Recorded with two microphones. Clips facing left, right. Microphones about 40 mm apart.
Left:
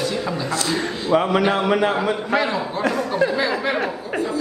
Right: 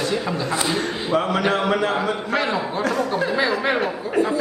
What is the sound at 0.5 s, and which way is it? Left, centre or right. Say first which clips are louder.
Speech: even; centre.